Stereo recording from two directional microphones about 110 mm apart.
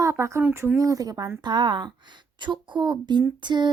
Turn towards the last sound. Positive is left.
turn(degrees=-45)  # may be behind; listen again after turning